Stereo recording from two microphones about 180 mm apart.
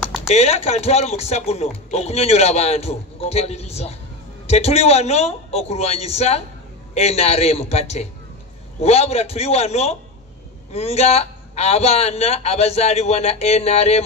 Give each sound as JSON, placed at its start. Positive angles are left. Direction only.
{"t": 0.0, "sound": "typing", "side_deg": 0}
{"t": 0.3, "sound": "speech", "side_deg": 35}